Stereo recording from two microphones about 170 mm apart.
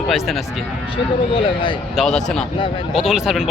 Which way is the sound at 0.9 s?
30° left (ahead or behind).